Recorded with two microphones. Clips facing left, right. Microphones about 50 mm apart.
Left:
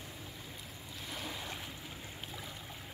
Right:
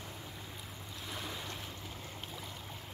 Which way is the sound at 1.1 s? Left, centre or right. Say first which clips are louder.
Even; centre.